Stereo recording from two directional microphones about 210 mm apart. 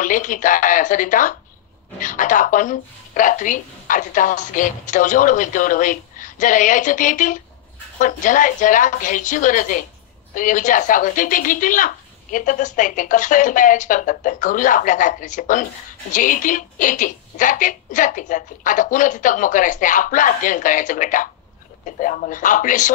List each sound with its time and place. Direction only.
0.0 s speech: 40° left (ahead or behind)